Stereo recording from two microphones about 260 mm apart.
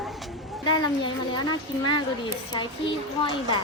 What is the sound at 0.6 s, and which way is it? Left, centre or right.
A woman's voice, centre.